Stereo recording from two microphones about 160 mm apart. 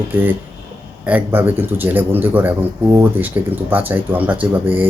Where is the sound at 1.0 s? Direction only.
10° right (ahead or behind).